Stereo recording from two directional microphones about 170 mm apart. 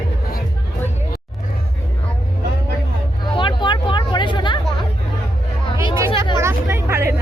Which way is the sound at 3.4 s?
25° left (ahead or behind).